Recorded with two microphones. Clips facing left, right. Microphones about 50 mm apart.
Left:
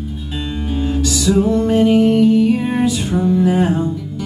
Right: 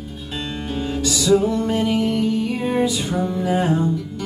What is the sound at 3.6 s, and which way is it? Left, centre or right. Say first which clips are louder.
Music: left 3 dB; centre.